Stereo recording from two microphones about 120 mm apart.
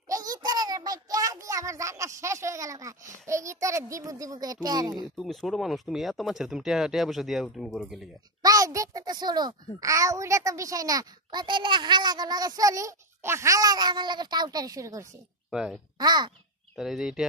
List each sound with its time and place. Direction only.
0.1 s a sound: 30° right (ahead or behind)
3.3 s a child's voice: 25° right (ahead or behind)
5.1 s speech: centre (ahead or behind)
8.4 s a child's voice: 30° right (ahead or behind)
15.5 s speech: 5° right (ahead or behind)
16.0 s a child's voice: 35° right (ahead or behind)
16.7 s speech: 5° right (ahead or behind)